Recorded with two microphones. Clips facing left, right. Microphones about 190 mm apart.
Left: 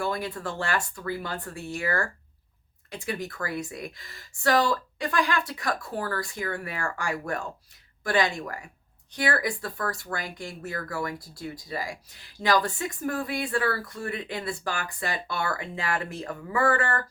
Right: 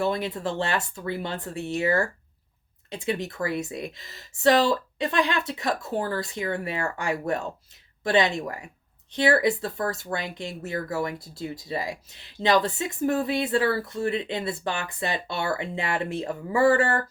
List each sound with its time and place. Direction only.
0.0 s speech: 20° right (ahead or behind)